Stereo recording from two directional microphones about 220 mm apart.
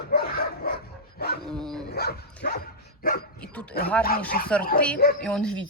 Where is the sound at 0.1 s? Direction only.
45° left (ahead or behind).